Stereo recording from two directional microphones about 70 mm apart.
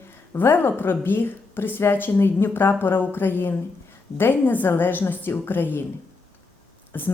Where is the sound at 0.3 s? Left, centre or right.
Left.